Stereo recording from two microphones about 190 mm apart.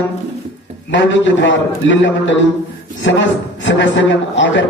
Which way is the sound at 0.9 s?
75° left (ahead or behind).